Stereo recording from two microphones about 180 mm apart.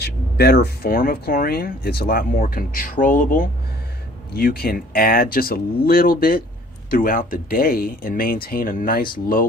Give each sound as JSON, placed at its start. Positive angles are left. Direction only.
{"t": 0.0, "sound": "speech", "side_deg": 65}